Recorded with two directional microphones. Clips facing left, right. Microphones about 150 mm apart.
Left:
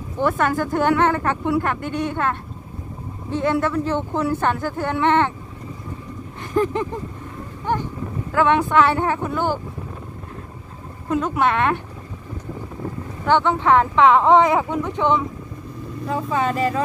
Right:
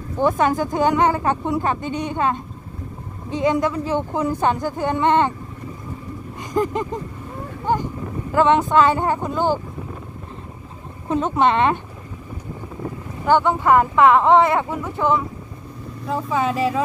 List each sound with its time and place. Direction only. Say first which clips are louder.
0.2 s speech: right 2 dB; 15° right (ahead or behind)
6.4 s speech: left 1 dB; 15° right (ahead or behind)
8.3 s speech: right 2 dB; 20° right (ahead or behind)
11.1 s speech: right 2 dB; 25° right (ahead or behind)
13.2 s speech: right 1 dB; 10° right (ahead or behind)